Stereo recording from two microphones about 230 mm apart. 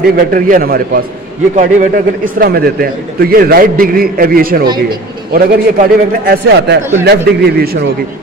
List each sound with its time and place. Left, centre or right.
0.0 s a man's voice: right